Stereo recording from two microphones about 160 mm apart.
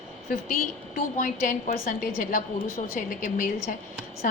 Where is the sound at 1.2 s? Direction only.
55° left (ahead or behind).